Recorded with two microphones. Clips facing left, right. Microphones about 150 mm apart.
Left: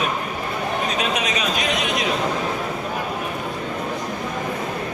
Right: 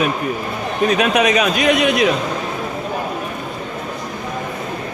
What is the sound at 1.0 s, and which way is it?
Speech, 65° right (ahead or behind).